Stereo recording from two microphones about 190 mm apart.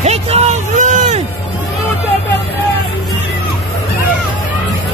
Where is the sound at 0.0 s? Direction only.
35° right (ahead or behind).